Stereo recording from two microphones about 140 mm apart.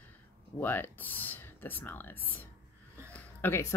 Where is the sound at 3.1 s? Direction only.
15° left (ahead or behind).